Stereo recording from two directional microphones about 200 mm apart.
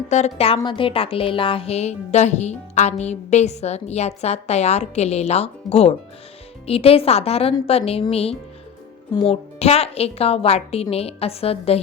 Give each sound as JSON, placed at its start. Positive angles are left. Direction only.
{"t": 0.1, "sound": "a woman's voice", "side_deg": 35}